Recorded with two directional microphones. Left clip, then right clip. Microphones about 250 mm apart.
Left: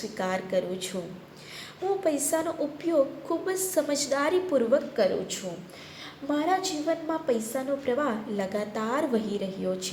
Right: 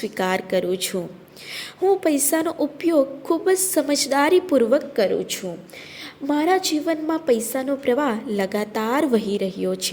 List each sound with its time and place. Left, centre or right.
0.0 s a woman's voice: right
2.0 s a woman's voice: right